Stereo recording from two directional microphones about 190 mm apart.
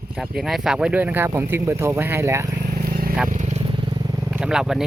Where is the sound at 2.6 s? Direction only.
50° right (ahead or behind).